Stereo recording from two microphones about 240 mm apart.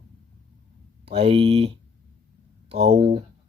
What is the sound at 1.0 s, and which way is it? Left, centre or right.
Speech, right.